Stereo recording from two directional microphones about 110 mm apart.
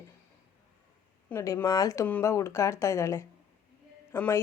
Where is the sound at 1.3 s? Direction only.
20° left (ahead or behind).